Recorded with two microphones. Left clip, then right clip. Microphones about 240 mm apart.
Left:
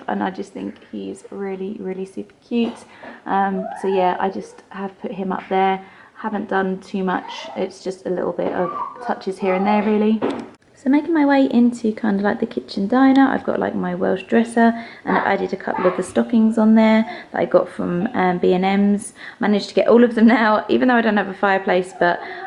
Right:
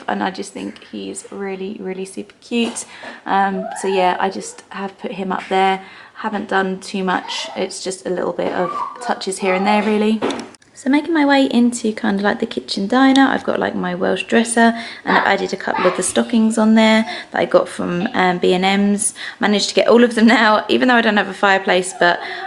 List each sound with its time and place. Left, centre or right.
0.0 s speech: centre
3.9 s speech: centre
16.4 s speech: left
16.7 s speech: centre